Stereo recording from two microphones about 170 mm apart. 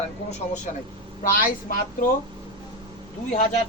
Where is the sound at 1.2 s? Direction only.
55° left (ahead or behind).